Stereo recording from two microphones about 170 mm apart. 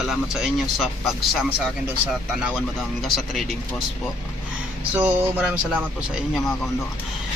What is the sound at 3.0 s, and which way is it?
Speech, centre (ahead or behind).